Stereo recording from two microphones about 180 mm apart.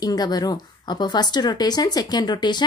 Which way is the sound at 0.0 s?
20° left (ahead or behind).